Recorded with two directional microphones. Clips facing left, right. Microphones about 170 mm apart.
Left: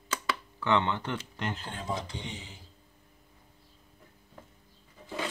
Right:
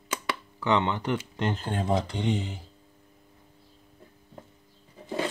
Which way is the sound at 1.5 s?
50° right (ahead or behind).